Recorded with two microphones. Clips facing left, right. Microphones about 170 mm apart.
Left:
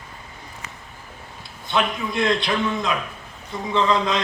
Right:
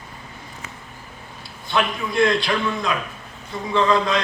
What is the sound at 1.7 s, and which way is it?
A man's voice, 20° left (ahead or behind).